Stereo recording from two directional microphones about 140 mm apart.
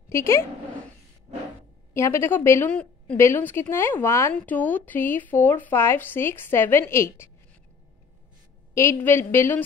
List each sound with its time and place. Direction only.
0.1 s a woman's voice: 20° left (ahead or behind)
2.0 s a woman's voice: 20° left (ahead or behind)
8.7 s speech: 20° left (ahead or behind)